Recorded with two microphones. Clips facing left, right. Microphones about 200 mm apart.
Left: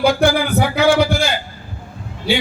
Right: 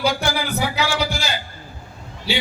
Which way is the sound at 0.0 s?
55° left (ahead or behind).